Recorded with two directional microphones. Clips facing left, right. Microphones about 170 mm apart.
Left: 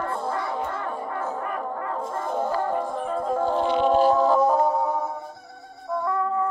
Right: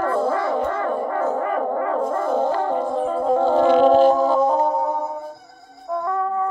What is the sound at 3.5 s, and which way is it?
Music, 80° right.